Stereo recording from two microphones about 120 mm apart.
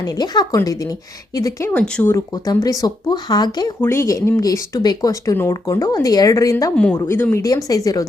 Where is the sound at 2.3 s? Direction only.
30° left (ahead or behind).